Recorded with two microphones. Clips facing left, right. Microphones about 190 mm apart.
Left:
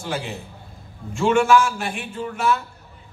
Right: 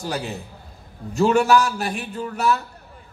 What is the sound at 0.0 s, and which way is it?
A man's voice, 40° right (ahead or behind).